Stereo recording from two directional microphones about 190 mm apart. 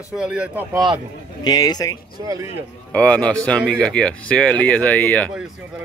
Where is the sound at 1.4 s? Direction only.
20° left (ahead or behind).